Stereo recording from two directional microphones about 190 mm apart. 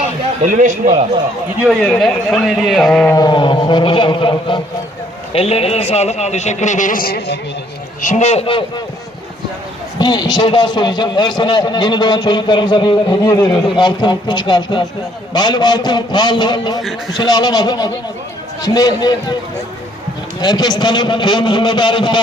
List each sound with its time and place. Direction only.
0.4 s a man's voice: 40° right (ahead or behind)
1.6 s a man's voice: centre (ahead or behind)
3.2 s a man's voice: 25° left (ahead or behind); by 7.3 s 50° left (ahead or behind)
8.0 s a man's voice: 35° left (ahead or behind)
10.0 s a man's voice: 20° left (ahead or behind)
20.4 s a man's voice: 20° left (ahead or behind)